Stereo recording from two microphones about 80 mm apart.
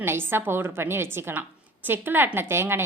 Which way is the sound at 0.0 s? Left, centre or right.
Right.